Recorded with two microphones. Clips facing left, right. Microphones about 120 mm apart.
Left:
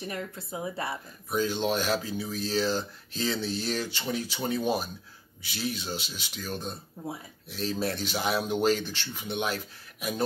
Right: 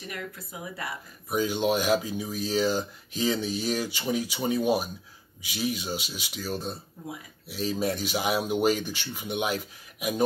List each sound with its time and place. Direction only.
0.1 s speech: 30° left (ahead or behind)
1.3 s speech: 10° right (ahead or behind)